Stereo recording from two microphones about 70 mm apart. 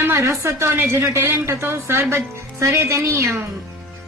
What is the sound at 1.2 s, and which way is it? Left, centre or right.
A man's voice, right.